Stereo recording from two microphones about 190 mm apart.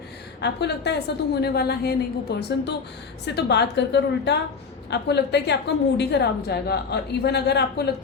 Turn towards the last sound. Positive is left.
turn(degrees=60)  # may be behind; listen again after turning